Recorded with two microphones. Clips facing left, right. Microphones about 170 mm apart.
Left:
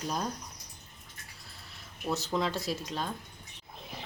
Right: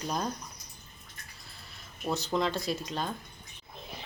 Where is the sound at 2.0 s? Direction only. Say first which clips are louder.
Right 1 dB; centre (ahead or behind).